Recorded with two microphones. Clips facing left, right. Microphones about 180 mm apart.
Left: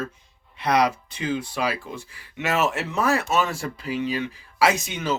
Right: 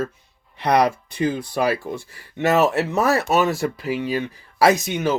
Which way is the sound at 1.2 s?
40° right (ahead or behind).